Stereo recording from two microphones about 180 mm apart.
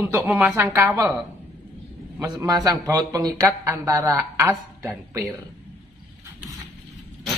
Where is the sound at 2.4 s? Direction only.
20° right (ahead or behind).